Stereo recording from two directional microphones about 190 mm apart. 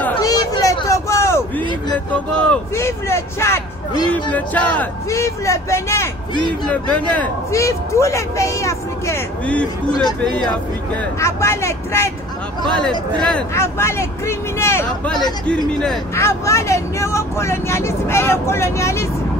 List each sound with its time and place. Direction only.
0.2 s vehicle: 20° left (ahead or behind)
2.4 s speech: 15° left (ahead or behind)
11.1 s speech: 15° left (ahead or behind)
14.9 s speech: centre (ahead or behind)
16.2 s speech: 15° left (ahead or behind)